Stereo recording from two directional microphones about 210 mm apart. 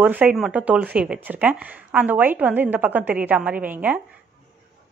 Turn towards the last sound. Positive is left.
turn(degrees=-5)  # may be behind; listen again after turning